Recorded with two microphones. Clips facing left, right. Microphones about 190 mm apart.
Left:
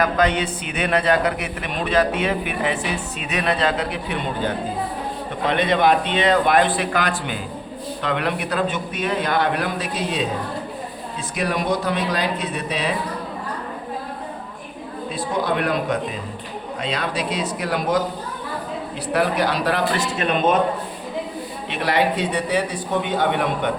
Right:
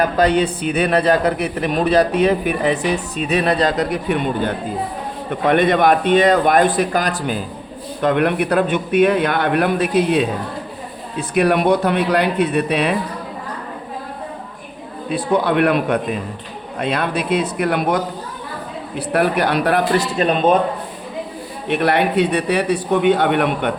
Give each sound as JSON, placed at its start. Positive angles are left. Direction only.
{"t": 0.0, "sound": "a man's voice", "side_deg": -35}
{"t": 8.0, "sound": "a man's voice", "side_deg": -50}
{"t": 15.1, "sound": "a man's voice", "side_deg": -65}
{"t": 20.0, "sound": "a man's voice", "side_deg": -35}
{"t": 21.7, "sound": "a man's voice", "side_deg": -55}